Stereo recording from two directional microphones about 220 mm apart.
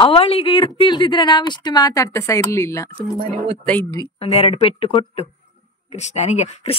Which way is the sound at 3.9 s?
25° left (ahead or behind).